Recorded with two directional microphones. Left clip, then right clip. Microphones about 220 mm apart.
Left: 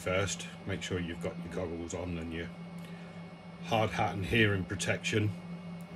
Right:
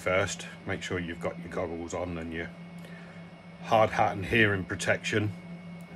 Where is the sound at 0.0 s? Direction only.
Centre (ahead or behind).